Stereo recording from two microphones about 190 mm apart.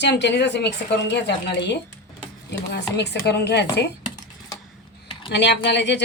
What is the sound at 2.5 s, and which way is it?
A woman's voice, 65° left (ahead or behind).